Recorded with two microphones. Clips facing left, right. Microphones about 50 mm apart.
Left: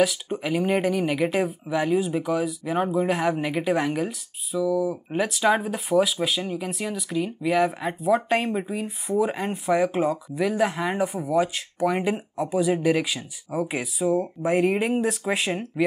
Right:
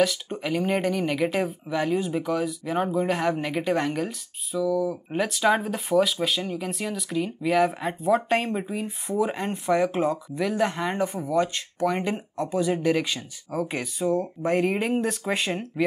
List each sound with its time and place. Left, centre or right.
0.0 s speech: centre